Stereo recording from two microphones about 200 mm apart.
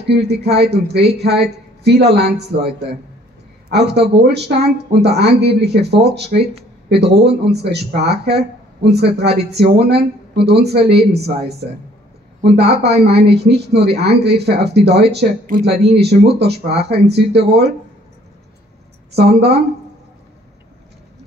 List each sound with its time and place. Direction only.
0.3 s speech: 55° right (ahead or behind)
12.5 s speech: 55° right (ahead or behind)